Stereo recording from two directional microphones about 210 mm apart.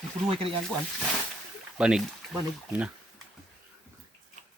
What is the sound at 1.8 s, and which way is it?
Speech, 5° right (ahead or behind).